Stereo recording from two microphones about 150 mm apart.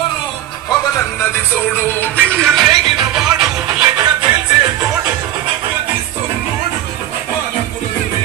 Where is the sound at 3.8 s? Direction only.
30° right (ahead or behind).